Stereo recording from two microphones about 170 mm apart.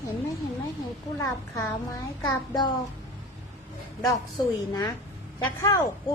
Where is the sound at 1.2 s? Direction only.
20° left (ahead or behind).